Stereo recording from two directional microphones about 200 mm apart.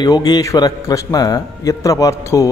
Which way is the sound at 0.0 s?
20° left (ahead or behind).